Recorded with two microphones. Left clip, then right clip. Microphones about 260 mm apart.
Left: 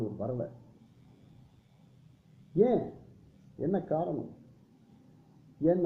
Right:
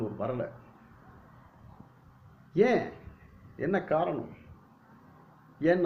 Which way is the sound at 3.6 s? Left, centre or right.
Right.